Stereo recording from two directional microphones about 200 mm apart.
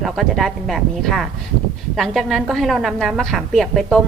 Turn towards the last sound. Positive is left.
turn(degrees=0)  # may be behind; listen again after turning